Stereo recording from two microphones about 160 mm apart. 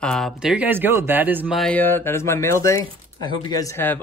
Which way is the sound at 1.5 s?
5° left (ahead or behind).